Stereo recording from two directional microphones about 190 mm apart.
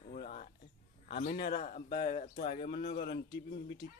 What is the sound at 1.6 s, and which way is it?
Speech, 45° left (ahead or behind).